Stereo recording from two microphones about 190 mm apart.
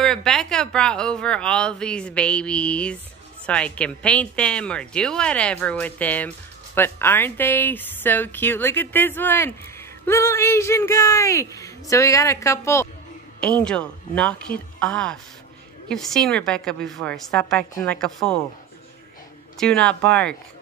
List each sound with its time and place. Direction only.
0.0 s a woman's voice: centre (ahead or behind)
19.6 s a woman's voice: 5° left (ahead or behind)